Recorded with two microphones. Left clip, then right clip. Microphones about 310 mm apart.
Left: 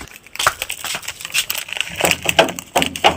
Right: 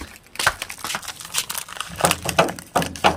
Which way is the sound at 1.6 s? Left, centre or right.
Right.